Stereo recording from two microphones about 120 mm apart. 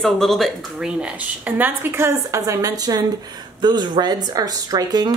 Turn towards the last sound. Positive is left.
turn(degrees=-35)  # may be behind; listen again after turning